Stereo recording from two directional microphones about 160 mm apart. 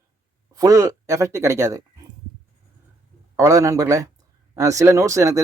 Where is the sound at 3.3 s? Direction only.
20° right (ahead or behind).